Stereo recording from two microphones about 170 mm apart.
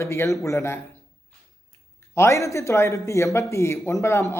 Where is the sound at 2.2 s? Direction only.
15° left (ahead or behind).